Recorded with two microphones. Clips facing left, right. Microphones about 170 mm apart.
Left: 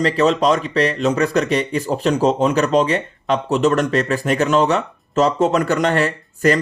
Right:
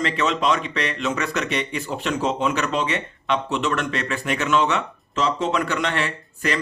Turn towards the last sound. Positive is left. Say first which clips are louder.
# left 9 dB
turn(degrees=40)  # may be behind; listen again after turning